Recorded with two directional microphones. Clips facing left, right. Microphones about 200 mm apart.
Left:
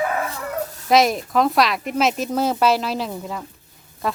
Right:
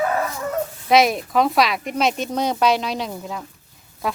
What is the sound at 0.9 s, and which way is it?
Speech, centre (ahead or behind).